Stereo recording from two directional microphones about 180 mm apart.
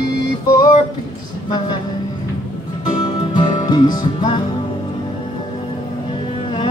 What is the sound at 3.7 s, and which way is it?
Music, 25° left (ahead or behind).